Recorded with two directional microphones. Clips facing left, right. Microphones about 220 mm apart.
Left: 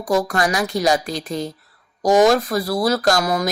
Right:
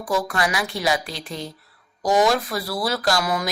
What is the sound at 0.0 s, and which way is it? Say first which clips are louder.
Speech: left 4 dB; 40° left (ahead or behind).